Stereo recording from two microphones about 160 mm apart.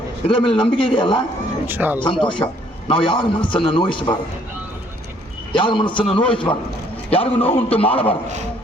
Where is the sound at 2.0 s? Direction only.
30° left (ahead or behind).